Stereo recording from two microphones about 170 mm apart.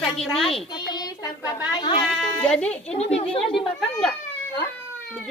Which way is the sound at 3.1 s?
35° left (ahead or behind).